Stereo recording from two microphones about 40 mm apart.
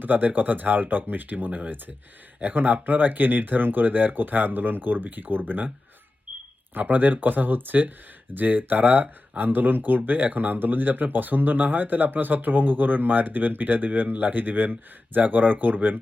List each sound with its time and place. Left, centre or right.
0.0 s speech: right
6.7 s speech: right